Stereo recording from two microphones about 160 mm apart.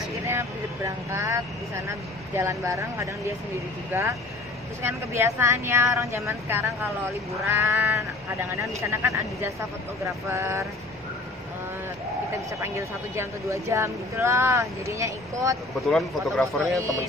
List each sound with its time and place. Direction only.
0.3 s speech: 15° right (ahead or behind)
12.5 s speech: 15° right (ahead or behind)
15.8 s speech: centre (ahead or behind)
16.7 s speech: 20° right (ahead or behind)